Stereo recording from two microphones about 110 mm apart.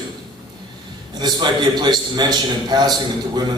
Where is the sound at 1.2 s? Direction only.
40° right (ahead or behind).